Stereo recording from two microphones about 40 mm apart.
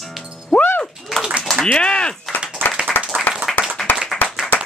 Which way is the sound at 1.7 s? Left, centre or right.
Left.